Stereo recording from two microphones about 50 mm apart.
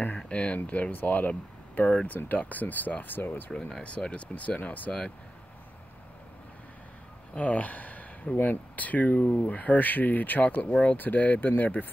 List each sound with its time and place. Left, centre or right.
0.3 s a sound: left
0.6 s speech: left
3.8 s speech: left
7.3 s speech: left
11.0 s speech: left